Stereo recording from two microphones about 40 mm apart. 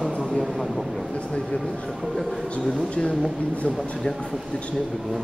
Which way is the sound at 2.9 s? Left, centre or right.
Left.